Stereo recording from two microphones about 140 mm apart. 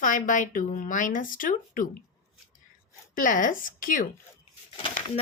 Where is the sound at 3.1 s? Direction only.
70° left (ahead or behind).